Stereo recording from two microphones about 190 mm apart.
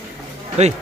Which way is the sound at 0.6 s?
35° right (ahead or behind).